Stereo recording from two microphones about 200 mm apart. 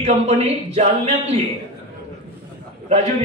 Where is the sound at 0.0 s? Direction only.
35° right (ahead or behind).